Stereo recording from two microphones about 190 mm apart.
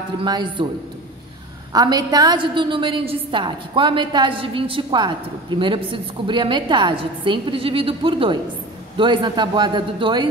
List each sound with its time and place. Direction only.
0.2 s a woman's voice: 25° right (ahead or behind)
1.7 s a woman's voice: 20° right (ahead or behind)